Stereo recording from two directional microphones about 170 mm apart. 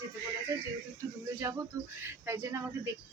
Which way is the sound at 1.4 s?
20° right (ahead or behind).